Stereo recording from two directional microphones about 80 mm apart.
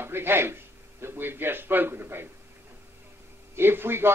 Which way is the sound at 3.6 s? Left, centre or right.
Right.